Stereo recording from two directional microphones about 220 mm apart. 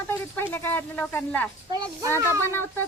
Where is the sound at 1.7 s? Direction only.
20° right (ahead or behind).